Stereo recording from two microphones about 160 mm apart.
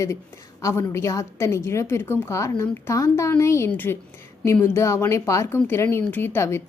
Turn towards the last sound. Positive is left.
turn(degrees=15)  # may be behind; listen again after turning